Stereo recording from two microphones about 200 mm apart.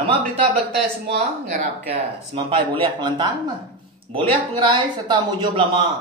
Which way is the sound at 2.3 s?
25° right (ahead or behind).